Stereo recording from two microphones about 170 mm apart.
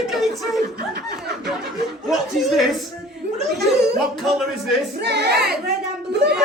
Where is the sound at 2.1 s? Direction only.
Centre (ahead or behind).